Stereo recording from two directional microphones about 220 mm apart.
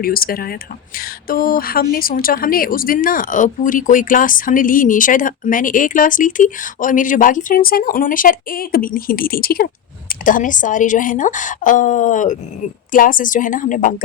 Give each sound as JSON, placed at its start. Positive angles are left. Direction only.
{"t": 0.0, "sound": "a woman's voice", "side_deg": 40}